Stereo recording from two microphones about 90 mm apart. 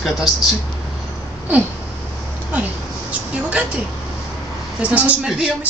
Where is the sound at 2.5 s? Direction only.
15° right (ahead or behind).